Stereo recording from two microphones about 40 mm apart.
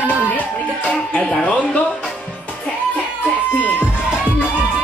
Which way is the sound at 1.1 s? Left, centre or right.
Left.